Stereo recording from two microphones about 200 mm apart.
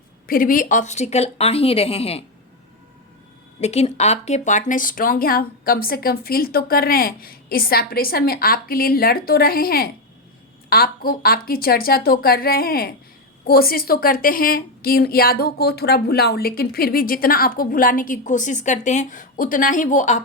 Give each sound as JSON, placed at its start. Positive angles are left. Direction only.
{"t": 0.3, "sound": "speech", "side_deg": 45}
{"t": 3.6, "sound": "a woman's voice", "side_deg": 30}